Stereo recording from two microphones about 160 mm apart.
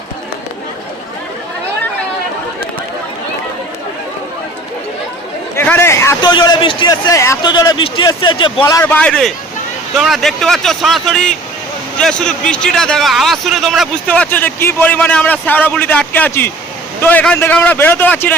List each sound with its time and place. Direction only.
5.5 s chatter: 15° left (ahead or behind)
6.2 s a man's voice: 25° left (ahead or behind)
8.8 s a man's voice: 10° left (ahead or behind)